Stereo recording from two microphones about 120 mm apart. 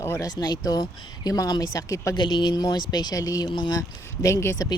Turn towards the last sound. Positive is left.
turn(degrees=20)  # may be behind; listen again after turning